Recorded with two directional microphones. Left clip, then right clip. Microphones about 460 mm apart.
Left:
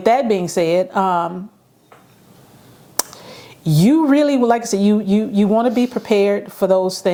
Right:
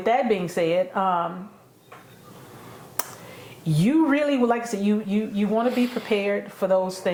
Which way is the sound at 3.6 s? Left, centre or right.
Left.